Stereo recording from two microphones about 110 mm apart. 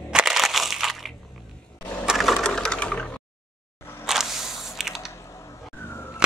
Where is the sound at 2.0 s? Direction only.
Centre (ahead or behind).